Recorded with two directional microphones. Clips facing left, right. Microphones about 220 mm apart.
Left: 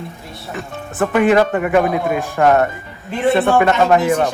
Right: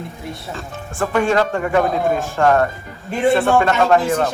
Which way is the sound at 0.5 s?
15° left (ahead or behind).